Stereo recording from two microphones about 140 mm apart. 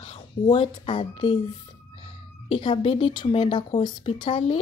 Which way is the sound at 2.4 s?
40° left (ahead or behind).